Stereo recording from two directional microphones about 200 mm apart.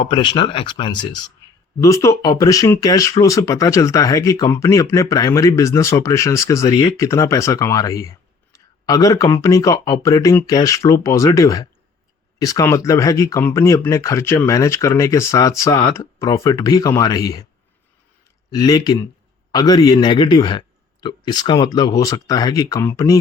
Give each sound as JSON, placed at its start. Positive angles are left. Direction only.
{"t": 0.0, "sound": "a man's voice", "side_deg": 25}
{"t": 18.5, "sound": "a man's voice", "side_deg": 20}